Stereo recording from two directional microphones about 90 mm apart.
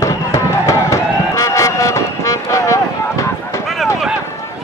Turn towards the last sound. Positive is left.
turn(degrees=35)  # may be behind; listen again after turning